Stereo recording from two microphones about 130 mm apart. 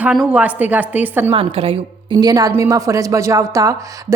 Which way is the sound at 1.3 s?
45° right (ahead or behind).